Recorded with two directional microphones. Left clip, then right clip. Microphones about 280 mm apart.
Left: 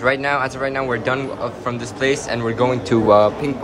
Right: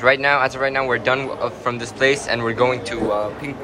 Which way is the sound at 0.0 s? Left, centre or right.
Centre.